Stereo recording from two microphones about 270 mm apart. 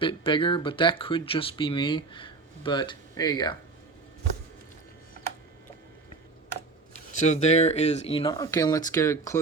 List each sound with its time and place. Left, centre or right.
0.0 s speech: centre
7.1 s speech: left; by 9.4 s centre